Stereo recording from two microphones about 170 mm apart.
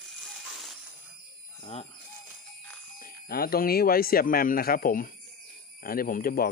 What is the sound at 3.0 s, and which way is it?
Speech, 60° left (ahead or behind).